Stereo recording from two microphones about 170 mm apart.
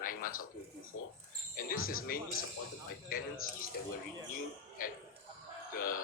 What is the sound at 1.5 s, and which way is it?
Speech, 55° left (ahead or behind).